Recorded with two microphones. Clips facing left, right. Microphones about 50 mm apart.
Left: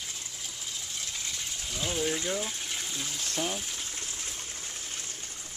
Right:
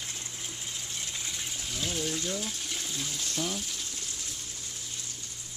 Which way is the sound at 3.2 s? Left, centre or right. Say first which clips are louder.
Left 2 dB; left.